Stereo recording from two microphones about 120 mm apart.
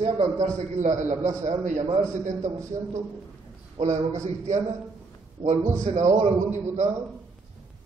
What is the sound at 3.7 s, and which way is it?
Speech, 70° right (ahead or behind).